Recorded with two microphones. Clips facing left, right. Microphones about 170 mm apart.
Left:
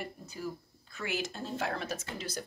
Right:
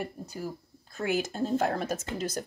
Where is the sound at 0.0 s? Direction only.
45° right (ahead or behind).